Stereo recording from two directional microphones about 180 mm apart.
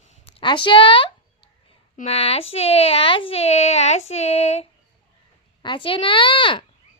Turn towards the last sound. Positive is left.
turn(degrees=30)  # may be behind; listen again after turning